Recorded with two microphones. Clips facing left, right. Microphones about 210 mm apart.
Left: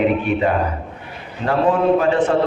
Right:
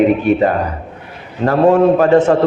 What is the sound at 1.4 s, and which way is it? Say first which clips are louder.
Speech: right 6 dB; 45° right (ahead or behind).